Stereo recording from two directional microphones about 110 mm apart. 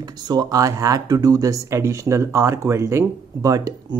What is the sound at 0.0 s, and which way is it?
Speech, 40° right (ahead or behind).